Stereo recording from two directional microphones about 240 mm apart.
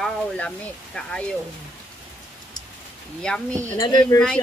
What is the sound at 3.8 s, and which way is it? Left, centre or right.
Speech, centre.